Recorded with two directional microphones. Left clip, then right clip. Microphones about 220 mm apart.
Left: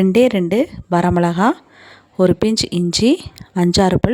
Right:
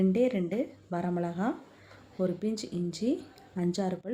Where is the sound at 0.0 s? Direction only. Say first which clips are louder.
Left 14 dB; 50° left (ahead or behind).